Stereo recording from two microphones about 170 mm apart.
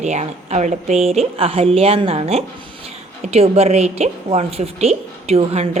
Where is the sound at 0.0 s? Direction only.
40° right (ahead or behind).